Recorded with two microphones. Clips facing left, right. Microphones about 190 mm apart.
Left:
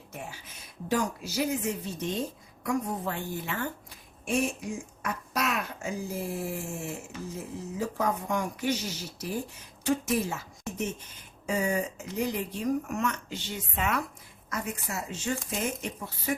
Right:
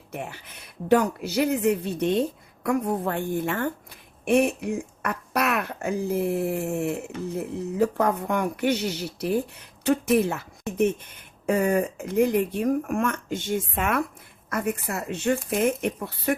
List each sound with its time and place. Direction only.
0.1 s speech: 60° right (ahead or behind)